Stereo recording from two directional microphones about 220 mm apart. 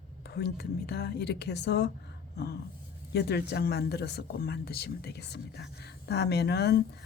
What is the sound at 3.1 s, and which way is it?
Speech, 50° left (ahead or behind).